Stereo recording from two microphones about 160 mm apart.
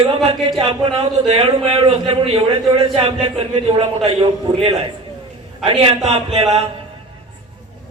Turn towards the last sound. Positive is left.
turn(degrees=-40)  # may be behind; listen again after turning